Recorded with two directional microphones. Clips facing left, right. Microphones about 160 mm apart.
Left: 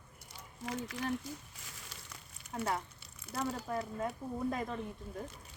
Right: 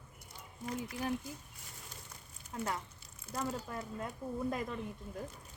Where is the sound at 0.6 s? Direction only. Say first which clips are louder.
Even; 90° left.